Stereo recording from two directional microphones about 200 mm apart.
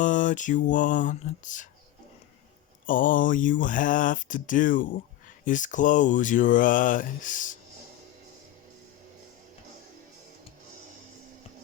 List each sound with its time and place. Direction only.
0.0 s speech: 40° left (ahead or behind)
2.8 s speech: 40° left (ahead or behind)